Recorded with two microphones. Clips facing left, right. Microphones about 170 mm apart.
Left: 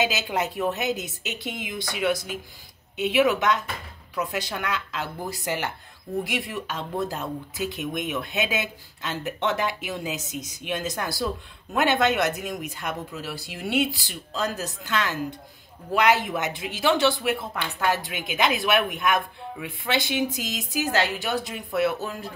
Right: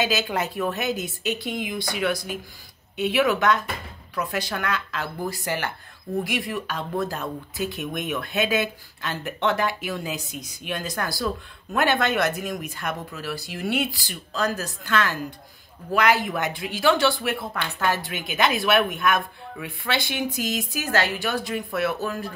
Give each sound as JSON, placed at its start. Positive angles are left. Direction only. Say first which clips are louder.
{"t": 0.0, "sound": "speech", "louder": "right 1 dB", "side_deg": 20}